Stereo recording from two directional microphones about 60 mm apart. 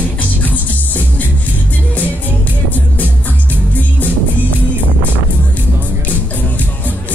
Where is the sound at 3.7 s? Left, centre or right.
Left.